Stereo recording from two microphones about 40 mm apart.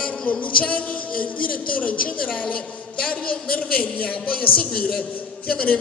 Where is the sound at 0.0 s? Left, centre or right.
Left.